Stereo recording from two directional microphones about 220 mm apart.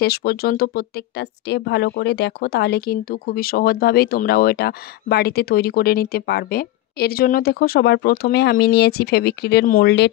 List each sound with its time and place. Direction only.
0.0 s speech: 45° left (ahead or behind)